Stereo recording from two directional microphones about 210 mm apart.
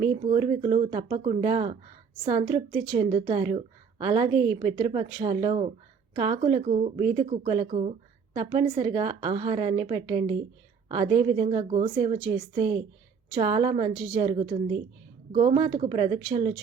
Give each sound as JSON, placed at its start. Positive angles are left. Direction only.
{"t": 0.3, "sound": "a woman's voice", "side_deg": -25}